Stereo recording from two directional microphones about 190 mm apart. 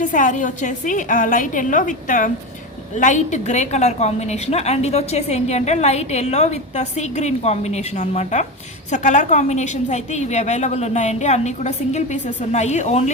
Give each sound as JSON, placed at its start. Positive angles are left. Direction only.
{"t": 0.0, "sound": "a woman's voice", "side_deg": 40}